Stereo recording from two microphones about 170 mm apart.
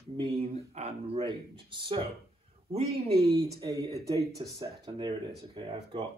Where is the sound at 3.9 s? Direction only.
20° right (ahead or behind).